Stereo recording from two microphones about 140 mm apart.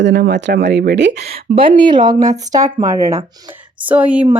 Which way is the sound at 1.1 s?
50° right (ahead or behind).